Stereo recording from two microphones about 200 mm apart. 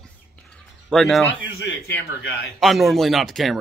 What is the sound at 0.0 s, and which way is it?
Bird, 5° left (ahead or behind).